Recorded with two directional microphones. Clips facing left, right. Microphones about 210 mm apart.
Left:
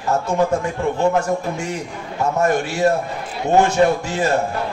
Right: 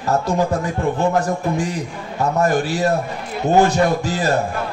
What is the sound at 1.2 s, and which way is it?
A man's voice, 35° right (ahead or behind).